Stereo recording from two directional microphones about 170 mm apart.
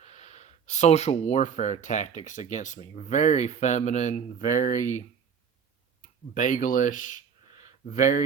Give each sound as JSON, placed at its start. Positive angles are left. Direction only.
{"t": 0.0, "sound": "speech", "side_deg": 40}
{"t": 6.0, "sound": "speech", "side_deg": 50}
{"t": 7.6, "sound": "a sound", "side_deg": 50}